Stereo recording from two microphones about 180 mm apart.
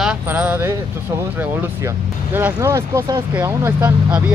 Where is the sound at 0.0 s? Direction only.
5° right (ahead or behind).